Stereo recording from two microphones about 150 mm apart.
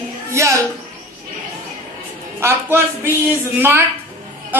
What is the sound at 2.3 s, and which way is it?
A man's voice, 15° right (ahead or behind).